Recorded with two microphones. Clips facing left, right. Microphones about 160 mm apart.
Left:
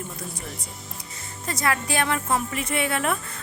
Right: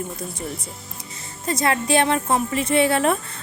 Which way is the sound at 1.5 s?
25° right (ahead or behind).